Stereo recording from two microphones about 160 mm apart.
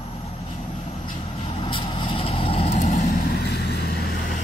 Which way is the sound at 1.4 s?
35° left (ahead or behind).